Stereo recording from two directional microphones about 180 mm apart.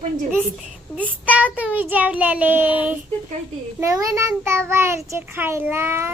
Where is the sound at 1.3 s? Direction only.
10° right (ahead or behind).